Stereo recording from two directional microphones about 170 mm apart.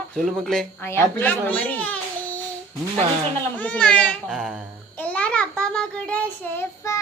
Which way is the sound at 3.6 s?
5° left (ahead or behind).